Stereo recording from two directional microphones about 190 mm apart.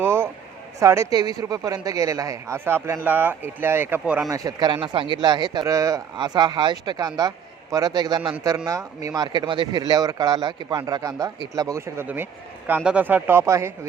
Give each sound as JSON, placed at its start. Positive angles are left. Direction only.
{"t": 0.0, "sound": "a sound", "side_deg": -10}
{"t": 0.8, "sound": "speech", "side_deg": -15}
{"t": 4.3, "sound": "a man's voice", "side_deg": -20}